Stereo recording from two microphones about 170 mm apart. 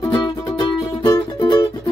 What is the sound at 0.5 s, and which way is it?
Music, 20° left (ahead or behind).